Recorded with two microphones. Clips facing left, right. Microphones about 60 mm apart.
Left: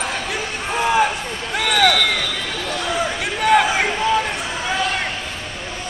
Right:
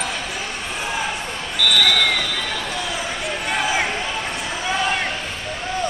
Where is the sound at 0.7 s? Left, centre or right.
Left.